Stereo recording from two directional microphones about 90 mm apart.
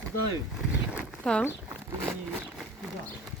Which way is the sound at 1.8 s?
30° right (ahead or behind).